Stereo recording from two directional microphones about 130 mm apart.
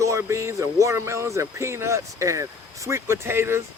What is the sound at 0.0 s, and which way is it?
Speech, 20° right (ahead or behind).